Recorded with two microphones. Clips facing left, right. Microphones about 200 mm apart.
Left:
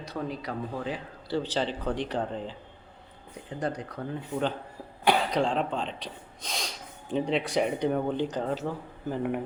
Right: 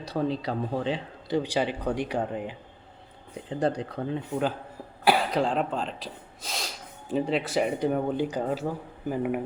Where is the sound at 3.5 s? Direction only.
30° right (ahead or behind).